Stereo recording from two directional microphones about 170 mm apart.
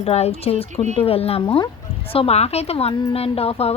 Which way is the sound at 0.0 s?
40° left (ahead or behind).